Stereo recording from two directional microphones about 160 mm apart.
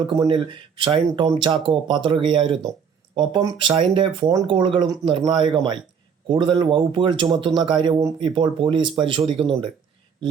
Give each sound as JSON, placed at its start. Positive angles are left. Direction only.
{"t": 0.0, "sound": "speech", "side_deg": -30}